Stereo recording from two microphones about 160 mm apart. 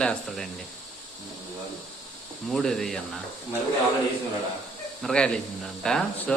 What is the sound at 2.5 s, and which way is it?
Speech, centre (ahead or behind).